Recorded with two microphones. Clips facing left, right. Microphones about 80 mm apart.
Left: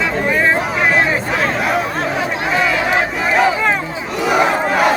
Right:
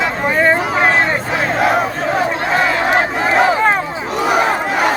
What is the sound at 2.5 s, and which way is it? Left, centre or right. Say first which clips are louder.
Crowd: right 1 dB; right.